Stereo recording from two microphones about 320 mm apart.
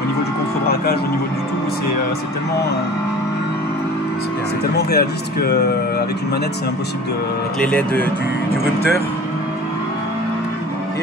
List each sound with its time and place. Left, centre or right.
4.7 s speech: left
7.6 s speech: centre